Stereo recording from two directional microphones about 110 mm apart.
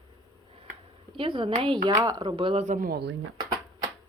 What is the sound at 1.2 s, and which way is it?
Speech, 50° right (ahead or behind).